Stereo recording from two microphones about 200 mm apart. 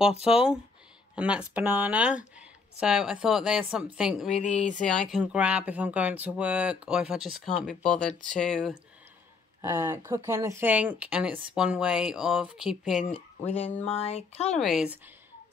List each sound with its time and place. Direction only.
0.3 s speech: 5° right (ahead or behind)
4.3 s a sound: 35° left (ahead or behind)
5.0 s speech: 5° right (ahead or behind)
9.6 s speech: 10° right (ahead or behind)
13.1 s speech: 30° left (ahead or behind)
13.8 s a sound: 30° left (ahead or behind)
14.6 s speech: centre (ahead or behind)